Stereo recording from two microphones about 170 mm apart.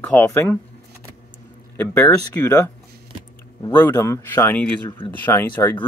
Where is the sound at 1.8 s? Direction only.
10° left (ahead or behind).